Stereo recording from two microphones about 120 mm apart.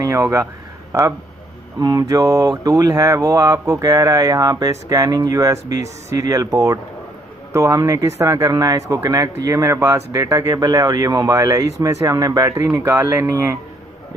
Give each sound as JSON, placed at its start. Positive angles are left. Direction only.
{"t": 0.0, "sound": "speech", "side_deg": -25}
{"t": 1.8, "sound": "speech", "side_deg": -30}